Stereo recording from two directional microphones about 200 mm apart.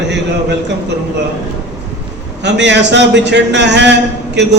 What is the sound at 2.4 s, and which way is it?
A man's voice, 60° right (ahead or behind).